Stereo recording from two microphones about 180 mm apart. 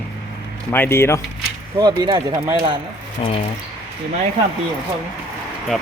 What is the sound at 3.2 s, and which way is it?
Speech, 30° left (ahead or behind).